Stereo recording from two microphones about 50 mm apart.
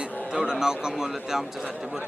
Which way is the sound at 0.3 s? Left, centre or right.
Centre.